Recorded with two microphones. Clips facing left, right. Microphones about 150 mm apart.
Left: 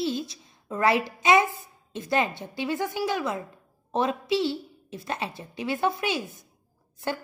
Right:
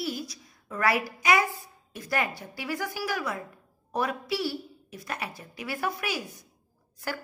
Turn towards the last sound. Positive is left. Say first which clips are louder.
# left 4 dB
turn(degrees=25)  # may be behind; listen again after turning